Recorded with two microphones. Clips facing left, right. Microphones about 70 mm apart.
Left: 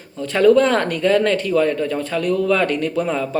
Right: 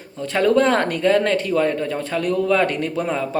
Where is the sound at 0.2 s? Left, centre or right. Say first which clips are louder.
Left 3 dB; right.